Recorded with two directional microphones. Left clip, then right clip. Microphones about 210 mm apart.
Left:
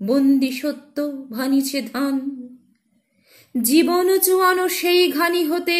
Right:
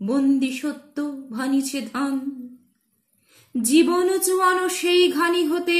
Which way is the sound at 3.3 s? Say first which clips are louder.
Left 1 dB; 15° left (ahead or behind).